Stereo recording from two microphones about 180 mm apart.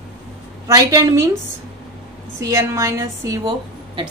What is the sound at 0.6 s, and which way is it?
Speech, 20° right (ahead or behind).